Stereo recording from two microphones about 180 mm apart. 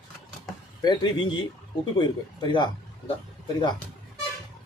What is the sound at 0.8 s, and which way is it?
A man's voice, 25° left (ahead or behind).